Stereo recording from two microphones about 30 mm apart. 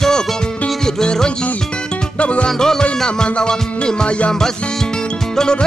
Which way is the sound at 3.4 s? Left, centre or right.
Left.